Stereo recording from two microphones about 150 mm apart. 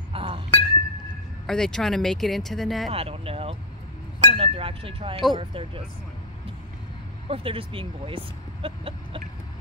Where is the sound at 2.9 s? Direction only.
40° right (ahead or behind).